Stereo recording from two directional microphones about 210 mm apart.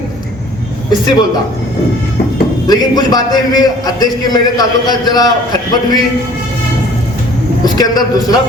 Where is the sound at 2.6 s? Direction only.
20° left (ahead or behind).